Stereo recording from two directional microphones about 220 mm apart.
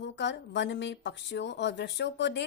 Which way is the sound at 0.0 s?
55° left (ahead or behind).